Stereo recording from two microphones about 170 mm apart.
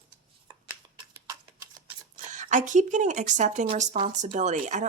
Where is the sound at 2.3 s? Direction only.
45° right (ahead or behind).